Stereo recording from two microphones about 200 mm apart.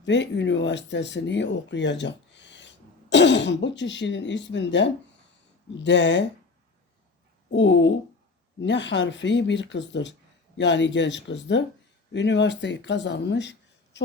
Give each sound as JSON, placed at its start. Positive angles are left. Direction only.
{"t": 0.0, "sound": "speech", "side_deg": 60}
{"t": 7.5, "sound": "speech", "side_deg": 65}